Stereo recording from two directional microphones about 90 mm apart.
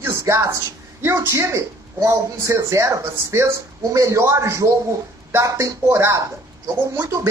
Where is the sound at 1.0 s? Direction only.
30° right (ahead or behind).